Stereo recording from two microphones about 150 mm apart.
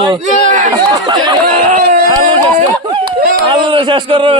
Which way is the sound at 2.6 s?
60° right (ahead or behind).